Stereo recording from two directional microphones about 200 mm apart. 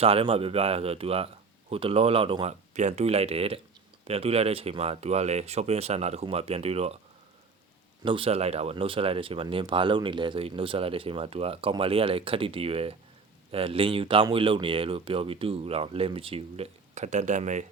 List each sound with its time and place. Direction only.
0.0 s speech: 30° right (ahead or behind)
8.0 s speech: 25° right (ahead or behind)